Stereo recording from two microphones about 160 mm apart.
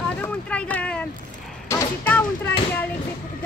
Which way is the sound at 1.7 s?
15° left (ahead or behind).